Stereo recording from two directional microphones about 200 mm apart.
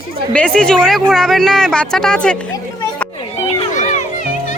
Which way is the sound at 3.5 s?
35° left (ahead or behind).